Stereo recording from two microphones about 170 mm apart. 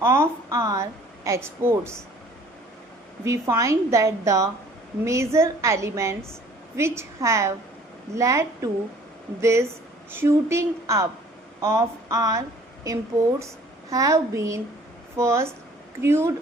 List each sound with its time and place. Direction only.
0.0 s a woman's voice: 15° right (ahead or behind)
3.2 s a woman's voice: 20° right (ahead or behind)